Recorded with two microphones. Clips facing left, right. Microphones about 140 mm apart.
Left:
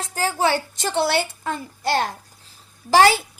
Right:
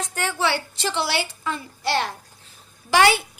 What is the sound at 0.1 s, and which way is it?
A child's voice, 35° left (ahead or behind).